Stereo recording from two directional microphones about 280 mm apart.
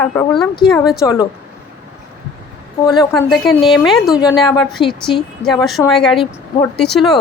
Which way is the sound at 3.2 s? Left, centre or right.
Centre.